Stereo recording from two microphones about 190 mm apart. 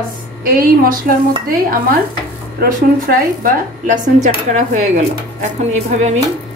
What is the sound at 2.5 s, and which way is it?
Speech, 50° right (ahead or behind).